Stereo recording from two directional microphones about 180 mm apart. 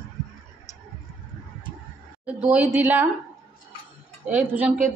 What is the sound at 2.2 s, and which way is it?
Speech, 10° right (ahead or behind).